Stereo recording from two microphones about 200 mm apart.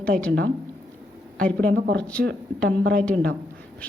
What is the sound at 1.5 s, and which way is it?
Speech, 55° right (ahead or behind).